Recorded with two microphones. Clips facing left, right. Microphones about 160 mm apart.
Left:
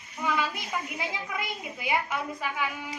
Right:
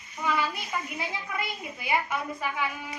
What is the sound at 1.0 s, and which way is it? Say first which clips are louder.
A woman's voice: even; 15° left (ahead or behind).